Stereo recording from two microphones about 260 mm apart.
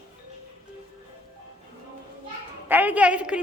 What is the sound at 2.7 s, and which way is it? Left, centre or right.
Speech, centre.